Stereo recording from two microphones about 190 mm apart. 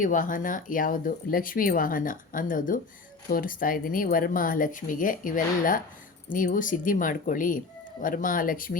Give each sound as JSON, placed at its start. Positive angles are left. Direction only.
{"t": 0.0, "sound": "speech", "side_deg": 45}